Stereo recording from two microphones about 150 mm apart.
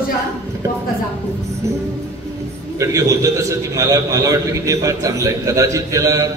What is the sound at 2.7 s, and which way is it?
A man's voice, 20° right (ahead or behind).